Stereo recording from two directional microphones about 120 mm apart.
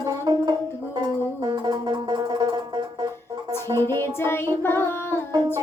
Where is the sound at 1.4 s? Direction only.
35° right (ahead or behind).